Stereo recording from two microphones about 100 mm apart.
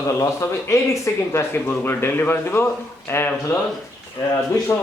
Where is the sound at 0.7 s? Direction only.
30° left (ahead or behind).